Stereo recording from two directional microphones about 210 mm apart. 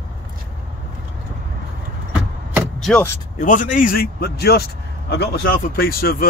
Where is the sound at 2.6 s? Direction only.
Centre (ahead or behind).